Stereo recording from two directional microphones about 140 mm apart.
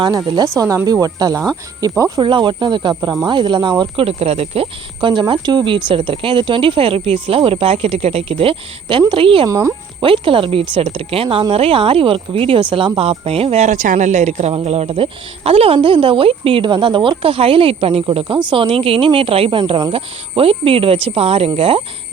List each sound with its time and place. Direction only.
0.3 s speech: 25° right (ahead or behind)
9.5 s speech: 25° right (ahead or behind)
10.0 s speech: 40° right (ahead or behind)